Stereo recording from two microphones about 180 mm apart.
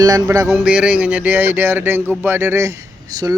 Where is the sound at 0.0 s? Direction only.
20° right (ahead or behind).